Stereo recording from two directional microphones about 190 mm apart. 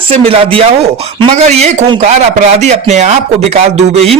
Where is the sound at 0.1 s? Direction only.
30° right (ahead or behind).